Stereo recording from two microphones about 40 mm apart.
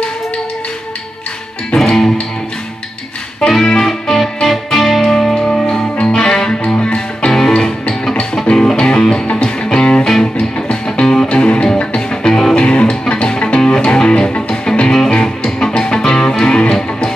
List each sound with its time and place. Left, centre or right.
1.8 s music: centre
3.3 s music: centre
5.0 s music: centre
7.3 s music: centre